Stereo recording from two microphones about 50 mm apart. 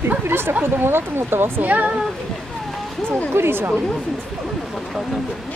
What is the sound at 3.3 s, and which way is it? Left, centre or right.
Speech, right.